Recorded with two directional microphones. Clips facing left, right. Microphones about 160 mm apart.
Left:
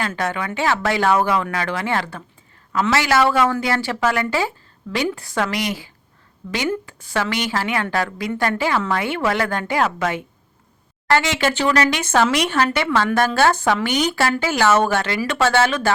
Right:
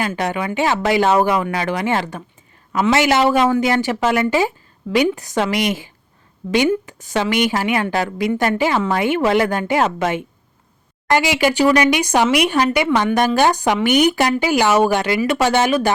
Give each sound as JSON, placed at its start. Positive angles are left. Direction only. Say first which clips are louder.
{"t": 0.0, "sound": "speech", "louder": "right 3 dB", "side_deg": -15}
{"t": 7.1, "sound": "speech", "louder": "right 4 dB", "side_deg": -20}
{"t": 11.1, "sound": "speech", "louder": "right 2 dB", "side_deg": -10}